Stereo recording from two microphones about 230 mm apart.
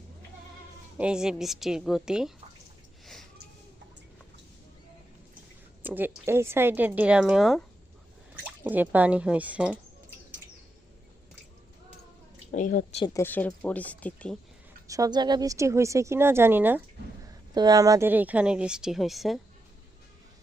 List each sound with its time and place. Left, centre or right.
0.9 s speech: centre
5.8 s a woman's voice: centre
8.6 s a woman's voice: centre
12.5 s a woman's voice: left
13.1 s speech: centre
14.8 s a woman's voice: centre